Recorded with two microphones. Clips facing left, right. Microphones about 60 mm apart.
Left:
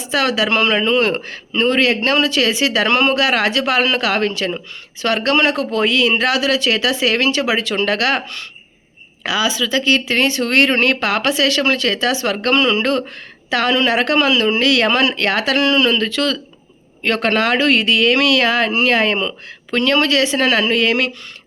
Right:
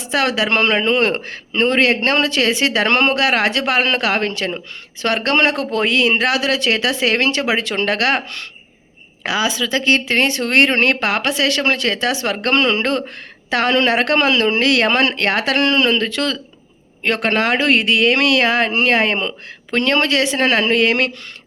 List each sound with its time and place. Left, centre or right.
0.1 s a woman's voice: right